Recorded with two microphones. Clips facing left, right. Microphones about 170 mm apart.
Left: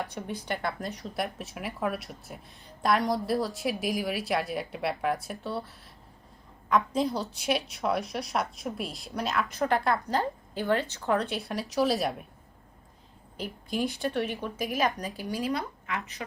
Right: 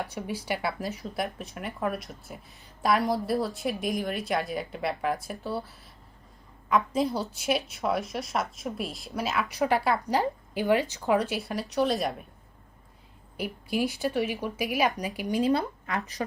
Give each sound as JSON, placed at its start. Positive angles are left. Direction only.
{"t": 0.0, "sound": "a woman's voice", "side_deg": -5}
{"t": 13.3, "sound": "a woman's voice", "side_deg": -10}
{"t": 15.9, "sound": "speech", "side_deg": -35}